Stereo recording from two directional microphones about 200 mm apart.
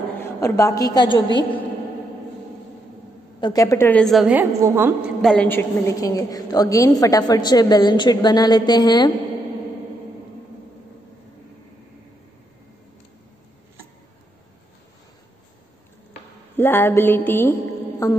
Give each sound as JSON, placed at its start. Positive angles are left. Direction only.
{"t": 0.2, "sound": "a woman's voice", "side_deg": 15}
{"t": 3.3, "sound": "a woman's voice", "side_deg": 20}
{"t": 5.2, "sound": "a woman's voice", "side_deg": 5}
{"t": 16.5, "sound": "music", "side_deg": 10}